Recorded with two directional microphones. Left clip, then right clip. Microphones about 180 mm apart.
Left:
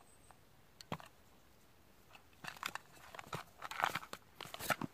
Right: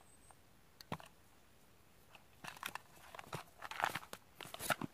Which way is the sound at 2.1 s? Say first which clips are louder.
Left 2 dB; 15° left (ahead or behind).